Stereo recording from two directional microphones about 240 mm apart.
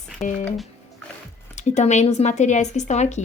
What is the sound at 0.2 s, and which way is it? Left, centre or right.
Speech, left.